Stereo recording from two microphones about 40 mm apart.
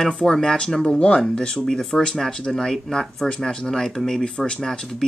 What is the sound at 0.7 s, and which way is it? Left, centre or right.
Speech, left.